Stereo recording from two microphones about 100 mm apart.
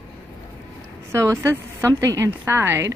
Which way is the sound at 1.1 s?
25° right (ahead or behind).